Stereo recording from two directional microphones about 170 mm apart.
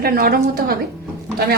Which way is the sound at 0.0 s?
60° right (ahead or behind).